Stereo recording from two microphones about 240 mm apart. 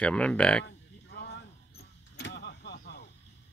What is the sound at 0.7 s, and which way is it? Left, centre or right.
Cattle, left.